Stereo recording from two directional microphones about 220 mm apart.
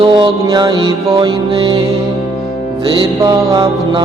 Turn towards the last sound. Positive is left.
turn(degrees=-20)  # may be behind; listen again after turning